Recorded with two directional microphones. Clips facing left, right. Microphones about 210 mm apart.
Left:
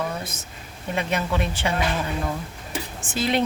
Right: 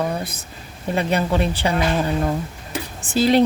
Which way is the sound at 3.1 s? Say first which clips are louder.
Right 7 dB; 35° right (ahead or behind).